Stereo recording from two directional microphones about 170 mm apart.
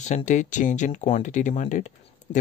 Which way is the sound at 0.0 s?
45° left (ahead or behind).